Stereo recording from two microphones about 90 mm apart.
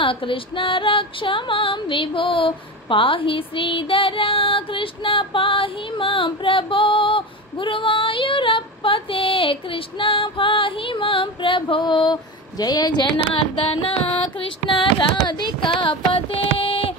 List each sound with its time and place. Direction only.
0.0 s music: 75° left (ahead or behind); by 13.0 s 50° left (ahead or behind)
13.3 s singing: 90° left
14.8 s music: 65° left (ahead or behind); by 16.9 s 90° left